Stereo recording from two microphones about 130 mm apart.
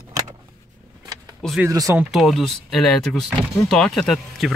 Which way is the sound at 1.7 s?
25° right (ahead or behind).